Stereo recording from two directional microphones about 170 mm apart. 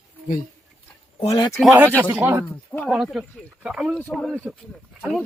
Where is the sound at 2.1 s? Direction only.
15° right (ahead or behind).